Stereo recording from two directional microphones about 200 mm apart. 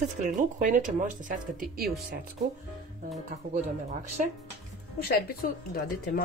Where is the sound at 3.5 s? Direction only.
40° right (ahead or behind).